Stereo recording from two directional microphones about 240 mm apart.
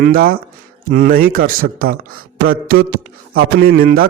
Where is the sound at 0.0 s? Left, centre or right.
Right.